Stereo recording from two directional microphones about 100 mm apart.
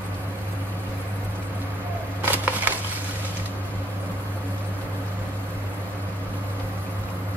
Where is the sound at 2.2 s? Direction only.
15° right (ahead or behind).